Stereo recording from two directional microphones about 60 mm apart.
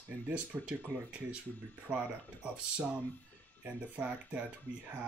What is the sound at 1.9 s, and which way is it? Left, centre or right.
Speech, centre.